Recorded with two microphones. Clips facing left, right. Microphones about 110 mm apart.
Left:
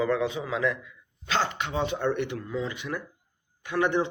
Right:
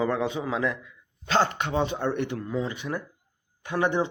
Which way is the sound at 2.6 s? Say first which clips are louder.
Right 1 dB; 30° right (ahead or behind).